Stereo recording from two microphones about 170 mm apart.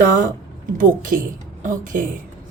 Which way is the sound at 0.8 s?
55° right (ahead or behind).